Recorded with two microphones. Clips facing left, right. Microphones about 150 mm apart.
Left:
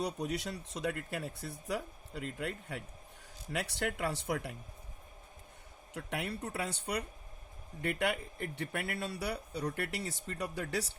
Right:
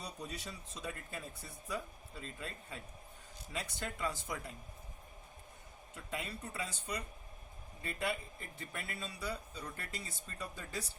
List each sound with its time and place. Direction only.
0.0 s a man's voice: 75° left (ahead or behind)
5.9 s a man's voice: 75° left (ahead or behind)
7.8 s a man's voice: 80° left